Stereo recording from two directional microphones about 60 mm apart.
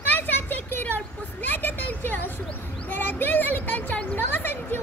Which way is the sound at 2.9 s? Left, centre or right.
Left.